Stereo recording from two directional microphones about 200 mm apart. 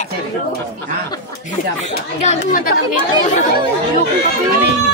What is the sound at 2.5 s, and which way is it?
Speech, 45° left (ahead or behind).